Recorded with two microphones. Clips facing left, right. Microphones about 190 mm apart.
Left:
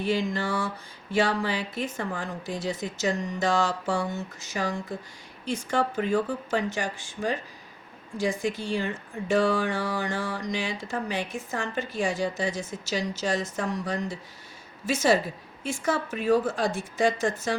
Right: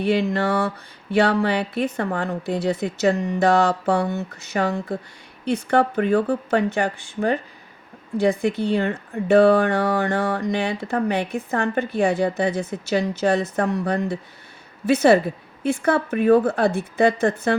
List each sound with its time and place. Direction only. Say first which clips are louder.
0.0 s speech: right 6 dB; 65° right (ahead or behind)